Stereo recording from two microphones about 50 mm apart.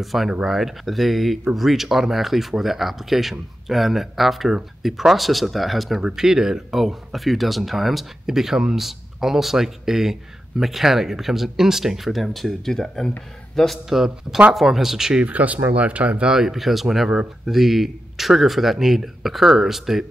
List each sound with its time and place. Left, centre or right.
0.0 s speech: centre
13.8 s speech: centre
15.2 s speech: right
16.3 s speech: centre